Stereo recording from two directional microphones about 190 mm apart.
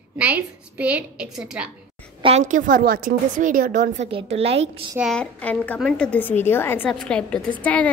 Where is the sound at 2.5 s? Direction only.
45° right (ahead or behind).